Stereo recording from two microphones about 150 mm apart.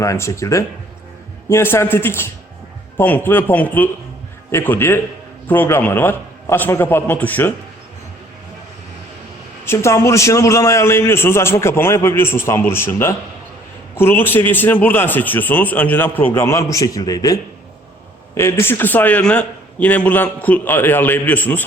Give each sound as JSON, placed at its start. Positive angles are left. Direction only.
{"t": 0.0, "sound": "a man's voice", "side_deg": 20}
{"t": 9.6, "sound": "a man's voice", "side_deg": 20}